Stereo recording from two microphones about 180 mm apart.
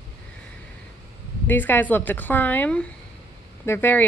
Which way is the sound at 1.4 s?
10° left (ahead or behind).